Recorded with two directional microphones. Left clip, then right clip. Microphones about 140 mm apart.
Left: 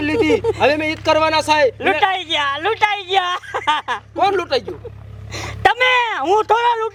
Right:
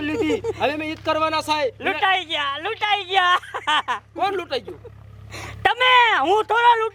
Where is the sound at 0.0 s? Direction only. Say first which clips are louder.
Left 7 dB; 15° right (ahead or behind).